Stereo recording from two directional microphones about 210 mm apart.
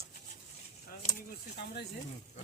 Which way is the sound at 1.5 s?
50° left (ahead or behind).